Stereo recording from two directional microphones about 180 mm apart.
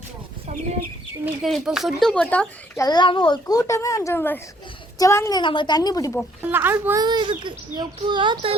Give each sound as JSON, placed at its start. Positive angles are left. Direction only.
{"t": 1.2, "sound": "speech", "side_deg": 0}
{"t": 2.8, "sound": "a child's voice", "side_deg": 25}
{"t": 5.4, "sound": "a child's voice", "side_deg": 25}
{"t": 6.5, "sound": "a child's voice", "side_deg": -10}
{"t": 7.0, "sound": "a child's voice", "side_deg": -25}